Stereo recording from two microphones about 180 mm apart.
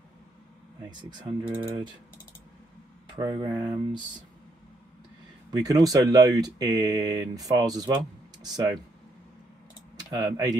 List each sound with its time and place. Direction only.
0.8 s speech: 25° right (ahead or behind)
3.2 s speech: 20° right (ahead or behind)
5.5 s speech: 20° right (ahead or behind)
10.1 s speech: 20° right (ahead or behind)